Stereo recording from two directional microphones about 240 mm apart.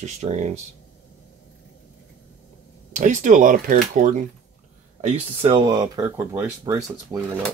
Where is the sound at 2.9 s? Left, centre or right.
Right; by 7.2 s centre.